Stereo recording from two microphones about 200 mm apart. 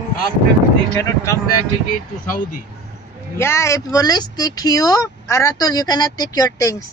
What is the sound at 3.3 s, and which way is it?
Speech, 15° left (ahead or behind).